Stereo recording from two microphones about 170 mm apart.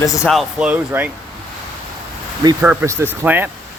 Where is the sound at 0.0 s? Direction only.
20° left (ahead or behind).